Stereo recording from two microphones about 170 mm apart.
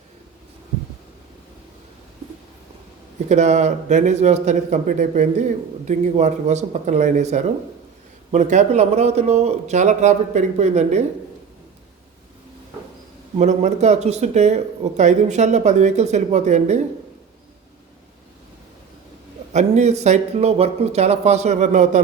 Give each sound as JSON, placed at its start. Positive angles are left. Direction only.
{"t": 3.2, "sound": "a man's voice", "side_deg": -40}
{"t": 13.4, "sound": "speech", "side_deg": -45}
{"t": 19.5, "sound": "a man's voice", "side_deg": -40}